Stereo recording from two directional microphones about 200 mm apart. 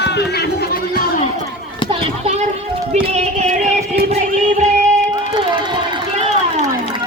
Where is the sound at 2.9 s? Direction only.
35° right (ahead or behind).